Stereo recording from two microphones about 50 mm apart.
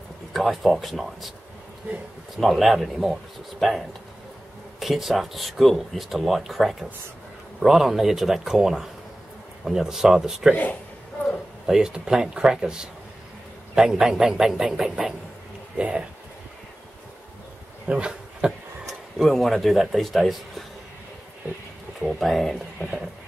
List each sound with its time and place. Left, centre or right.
0.3 s speech: centre
2.3 s speech: centre
10.5 s a man's voice: left
11.6 s speech: centre
17.8 s a sound: right
18.9 s speech: centre
22.2 s speech: centre